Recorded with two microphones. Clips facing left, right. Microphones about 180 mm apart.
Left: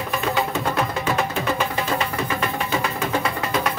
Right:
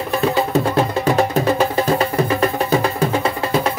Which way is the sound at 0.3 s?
35° right (ahead or behind).